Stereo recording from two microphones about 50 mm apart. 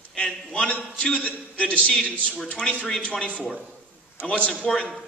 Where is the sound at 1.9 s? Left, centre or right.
Centre.